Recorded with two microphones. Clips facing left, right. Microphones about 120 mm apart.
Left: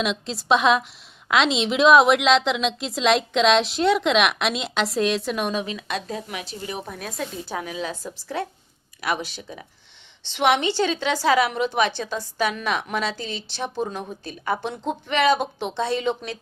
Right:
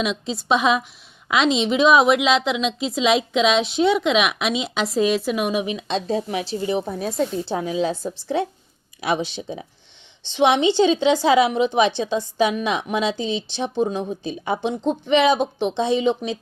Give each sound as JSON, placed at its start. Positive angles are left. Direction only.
{"t": 0.0, "sound": "a woman's voice", "side_deg": 0}